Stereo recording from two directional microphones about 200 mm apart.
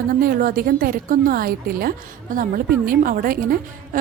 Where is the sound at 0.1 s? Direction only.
45° right (ahead or behind).